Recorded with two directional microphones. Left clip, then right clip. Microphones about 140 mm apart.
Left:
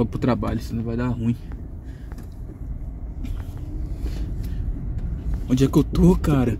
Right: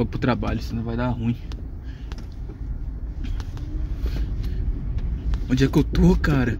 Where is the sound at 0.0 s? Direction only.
20° left (ahead or behind).